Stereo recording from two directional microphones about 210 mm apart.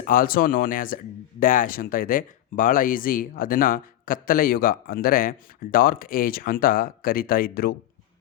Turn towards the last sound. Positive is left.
turn(degrees=45)  # may be behind; listen again after turning